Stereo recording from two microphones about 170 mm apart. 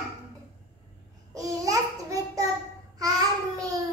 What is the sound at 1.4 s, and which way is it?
Babbling, 20° right (ahead or behind).